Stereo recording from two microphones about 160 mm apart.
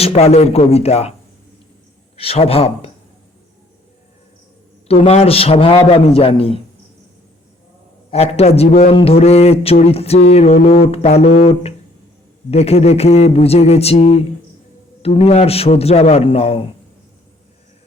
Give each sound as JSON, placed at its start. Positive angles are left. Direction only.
{"t": 0.0, "sound": "a man's voice", "side_deg": 40}
{"t": 2.1, "sound": "a man's voice", "side_deg": 35}
{"t": 4.9, "sound": "a man's voice", "side_deg": 40}
{"t": 8.1, "sound": "a man's voice", "side_deg": 40}